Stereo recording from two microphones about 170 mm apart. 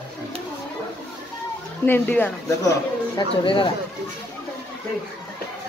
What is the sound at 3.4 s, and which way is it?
Speech, 30° left (ahead or behind).